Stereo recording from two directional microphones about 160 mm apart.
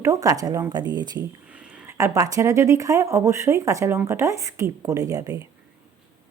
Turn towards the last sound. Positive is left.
turn(degrees=-25)  # may be behind; listen again after turning